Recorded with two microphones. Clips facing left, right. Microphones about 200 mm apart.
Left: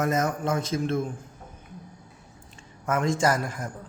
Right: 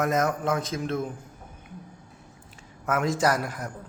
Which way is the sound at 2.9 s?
Centre (ahead or behind).